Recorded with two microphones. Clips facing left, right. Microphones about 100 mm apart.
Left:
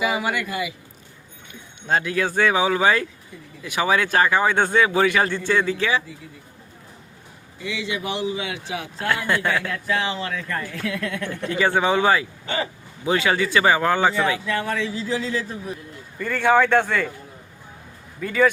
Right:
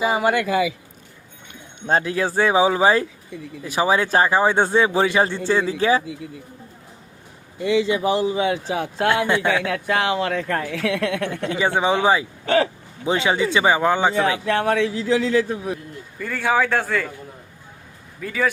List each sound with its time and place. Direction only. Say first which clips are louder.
0.0 s speech: right 4 dB; 40° right (ahead or behind)
1.9 s speech: right 2 dB; 30° right (ahead or behind)
7.6 s speech: right 9 dB; 45° right (ahead or behind)
9.1 s speech: even; 20° right (ahead or behind)
9.6 s speech: right 4 dB; 65° right (ahead or behind)
11.4 s speech: left 1 dB; 20° right (ahead or behind)
12.5 s speech: right 9 dB; 80° right
13.1 s speech: right 1 dB; 20° right (ahead or behind)
14.4 s speech: right 5 dB; 60° right (ahead or behind)
16.1 s a man's voice: left 3 dB; 5° right (ahead or behind)
18.2 s a man's voice: left 4 dB; centre (ahead or behind)